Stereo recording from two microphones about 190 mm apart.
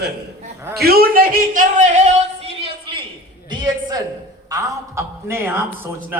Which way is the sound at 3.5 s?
20° right (ahead or behind).